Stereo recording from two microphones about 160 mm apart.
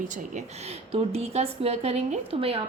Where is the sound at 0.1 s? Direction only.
45° right (ahead or behind).